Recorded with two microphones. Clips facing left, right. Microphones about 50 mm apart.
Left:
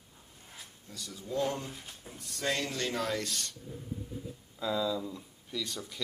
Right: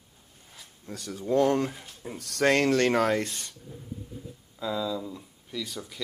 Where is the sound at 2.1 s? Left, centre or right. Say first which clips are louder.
Right 10 dB; right.